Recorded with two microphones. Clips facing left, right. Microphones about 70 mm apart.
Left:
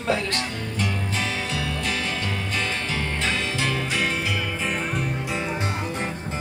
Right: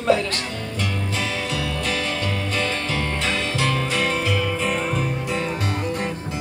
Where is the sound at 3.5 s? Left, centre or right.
Left.